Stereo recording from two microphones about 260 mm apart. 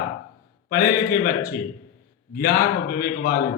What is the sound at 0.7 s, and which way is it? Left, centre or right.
A man's voice, left.